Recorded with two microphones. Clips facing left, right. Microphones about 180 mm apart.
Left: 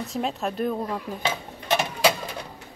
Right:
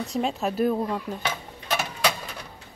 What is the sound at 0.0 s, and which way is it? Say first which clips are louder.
Speech: right 1 dB; centre (ahead or behind).